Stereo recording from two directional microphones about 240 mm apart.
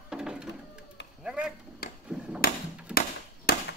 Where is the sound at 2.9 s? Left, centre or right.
Left.